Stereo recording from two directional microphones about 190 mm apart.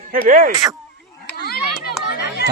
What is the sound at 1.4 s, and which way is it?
Children playing, 55° left (ahead or behind).